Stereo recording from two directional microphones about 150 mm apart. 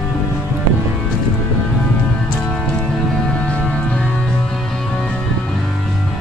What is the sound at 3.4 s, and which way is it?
Music, 10° left (ahead or behind).